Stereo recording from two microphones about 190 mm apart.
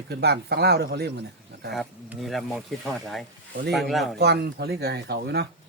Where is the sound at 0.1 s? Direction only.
60° right (ahead or behind).